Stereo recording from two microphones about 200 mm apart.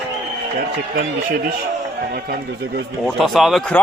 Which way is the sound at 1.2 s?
45° right (ahead or behind).